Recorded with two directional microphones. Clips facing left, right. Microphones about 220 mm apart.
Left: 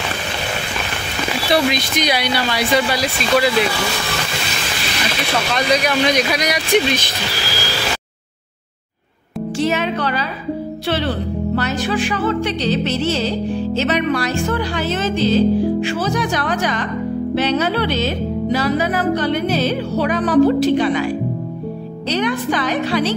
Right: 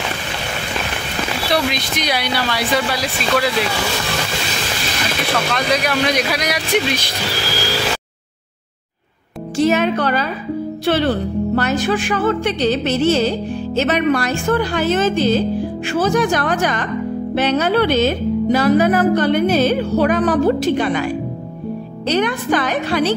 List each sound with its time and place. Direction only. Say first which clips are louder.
1.5 s speech: left 3 dB; centre (ahead or behind)
5.5 s speech: left 4 dB; 5° right (ahead or behind)
9.6 s music: right 4 dB; 45° right (ahead or behind)